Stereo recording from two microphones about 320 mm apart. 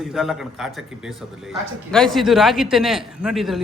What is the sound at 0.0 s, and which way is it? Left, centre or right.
A man's voice, centre.